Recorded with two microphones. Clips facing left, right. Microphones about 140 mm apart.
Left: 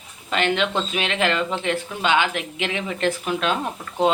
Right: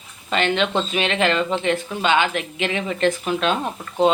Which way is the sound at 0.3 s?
10° left (ahead or behind).